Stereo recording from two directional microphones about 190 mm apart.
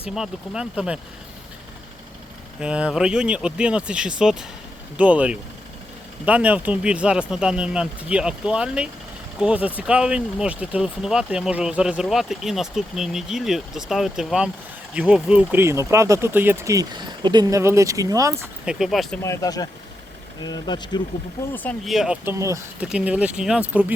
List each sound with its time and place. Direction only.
0.1 s speech: 5° right (ahead or behind)
2.6 s speech: 5° right (ahead or behind)
18.6 s speech: 5° right (ahead or behind)
19.2 s speech: 15° left (ahead or behind)
21.5 s speech: 10° left (ahead or behind)